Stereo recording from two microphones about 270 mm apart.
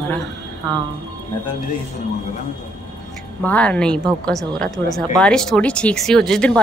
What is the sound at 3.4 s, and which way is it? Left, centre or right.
Speech, centre.